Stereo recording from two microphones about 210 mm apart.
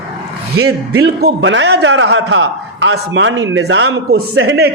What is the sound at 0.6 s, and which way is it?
Speech, 90° right.